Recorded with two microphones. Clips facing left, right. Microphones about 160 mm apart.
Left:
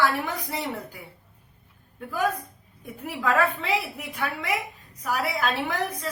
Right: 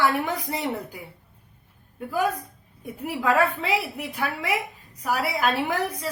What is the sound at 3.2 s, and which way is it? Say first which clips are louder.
A woman's voice: right 2 dB; 10° right (ahead or behind).